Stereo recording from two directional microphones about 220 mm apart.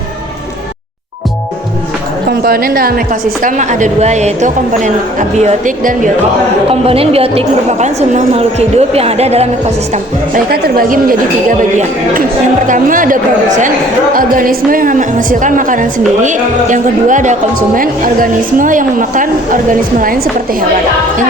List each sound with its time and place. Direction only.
2.4 s speech: 40° right (ahead or behind)
6.7 s a woman's voice: 25° right (ahead or behind)
10.5 s speech: 45° right (ahead or behind)